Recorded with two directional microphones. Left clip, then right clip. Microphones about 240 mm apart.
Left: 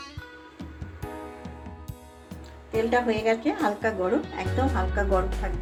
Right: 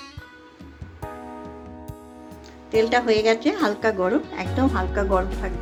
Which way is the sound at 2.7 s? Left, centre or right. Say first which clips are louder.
Right 5 dB; right.